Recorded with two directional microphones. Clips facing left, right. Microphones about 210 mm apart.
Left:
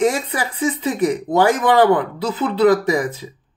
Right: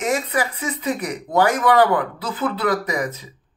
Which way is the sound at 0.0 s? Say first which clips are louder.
Left 3 dB; 30° left (ahead or behind).